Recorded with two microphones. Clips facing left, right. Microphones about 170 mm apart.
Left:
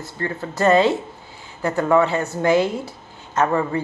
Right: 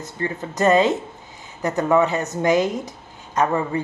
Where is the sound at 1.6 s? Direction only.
20° right (ahead or behind).